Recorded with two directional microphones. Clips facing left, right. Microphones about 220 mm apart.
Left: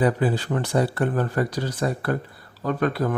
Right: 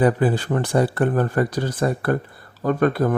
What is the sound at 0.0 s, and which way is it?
Speech, 50° right (ahead or behind).